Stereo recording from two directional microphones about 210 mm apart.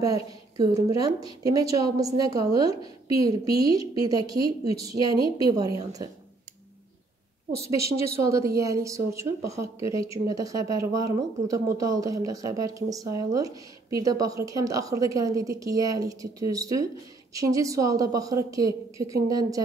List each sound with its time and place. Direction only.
0.0 s a woman's voice: 15° right (ahead or behind)
7.9 s a woman's voice: 15° right (ahead or behind)